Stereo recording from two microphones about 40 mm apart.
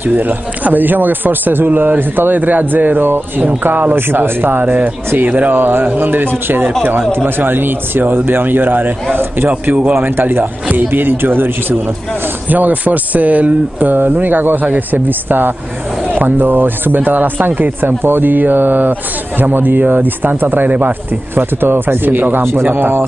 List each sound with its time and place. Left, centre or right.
0.1 s speech: right
5.6 s speech: right
10.0 s speech: right
12.4 s speech: right